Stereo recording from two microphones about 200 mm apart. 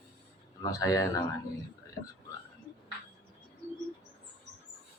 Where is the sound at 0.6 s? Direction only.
15° left (ahead or behind).